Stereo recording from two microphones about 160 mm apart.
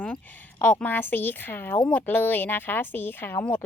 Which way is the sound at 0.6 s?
10° left (ahead or behind).